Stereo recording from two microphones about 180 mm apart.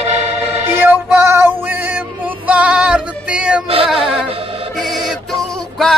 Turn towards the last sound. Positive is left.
turn(degrees=0)  # may be behind; listen again after turning